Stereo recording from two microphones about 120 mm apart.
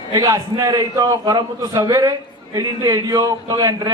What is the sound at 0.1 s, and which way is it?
A man's voice, 30° right (ahead or behind).